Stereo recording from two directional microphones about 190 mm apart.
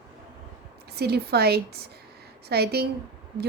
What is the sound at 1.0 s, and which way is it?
A woman's voice, 60° right (ahead or behind).